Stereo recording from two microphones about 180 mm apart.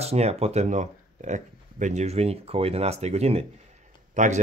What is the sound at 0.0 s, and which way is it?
Speech, 35° right (ahead or behind).